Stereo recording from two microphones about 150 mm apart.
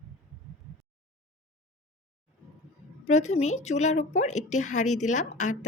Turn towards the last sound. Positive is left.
turn(degrees=55)  # may be behind; listen again after turning